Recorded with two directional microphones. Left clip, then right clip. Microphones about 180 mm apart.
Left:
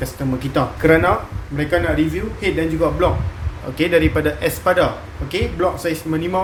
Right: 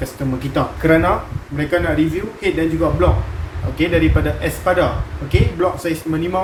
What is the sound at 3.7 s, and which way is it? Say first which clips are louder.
Speech: left 1 dB; 50° left (ahead or behind).